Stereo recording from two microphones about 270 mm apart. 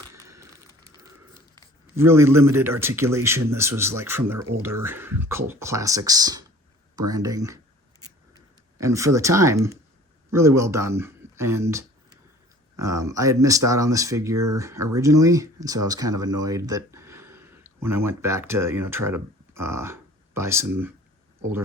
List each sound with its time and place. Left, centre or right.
0.1 s a sound: centre
2.0 s speech: centre
8.8 s speech: centre